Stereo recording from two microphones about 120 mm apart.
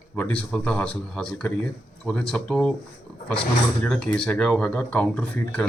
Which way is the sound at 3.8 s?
10° left (ahead or behind).